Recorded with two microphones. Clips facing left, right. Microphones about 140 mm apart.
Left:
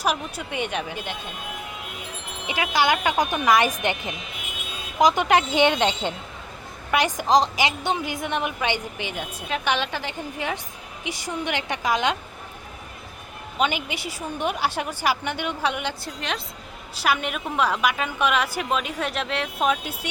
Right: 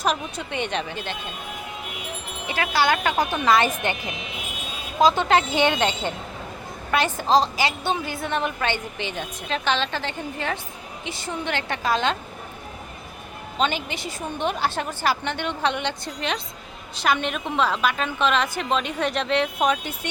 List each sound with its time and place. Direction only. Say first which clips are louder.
0.0 s a woman's voice: right 1 dB; 10° left (ahead or behind)
2.5 s a woman's voice: even; 15° left (ahead or behind)
13.6 s a woman's voice: even; 10° left (ahead or behind)